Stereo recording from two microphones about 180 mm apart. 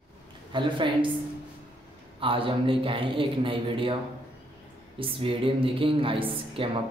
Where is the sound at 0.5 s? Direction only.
25° right (ahead or behind).